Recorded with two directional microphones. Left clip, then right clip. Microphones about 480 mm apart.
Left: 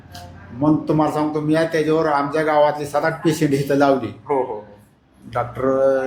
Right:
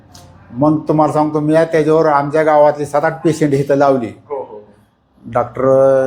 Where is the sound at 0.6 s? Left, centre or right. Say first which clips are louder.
Right 5 dB; centre.